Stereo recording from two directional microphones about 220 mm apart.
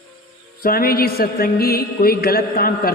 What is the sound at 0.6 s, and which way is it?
Music, 40° left (ahead or behind).